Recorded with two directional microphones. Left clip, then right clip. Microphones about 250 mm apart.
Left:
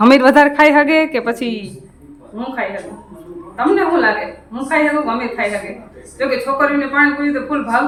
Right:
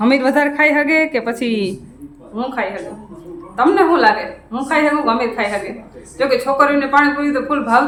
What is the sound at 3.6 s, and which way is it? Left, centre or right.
Speech, centre.